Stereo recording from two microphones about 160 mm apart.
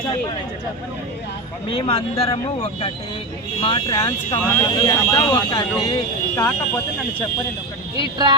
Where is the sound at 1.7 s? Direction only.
35° left (ahead or behind).